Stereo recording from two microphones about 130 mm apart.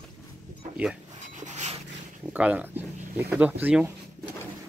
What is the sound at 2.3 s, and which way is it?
Speech, 10° right (ahead or behind).